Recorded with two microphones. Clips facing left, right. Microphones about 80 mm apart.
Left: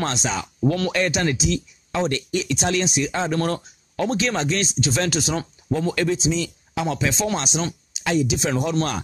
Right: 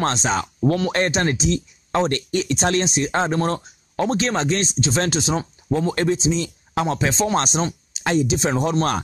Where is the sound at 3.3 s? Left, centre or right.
Right.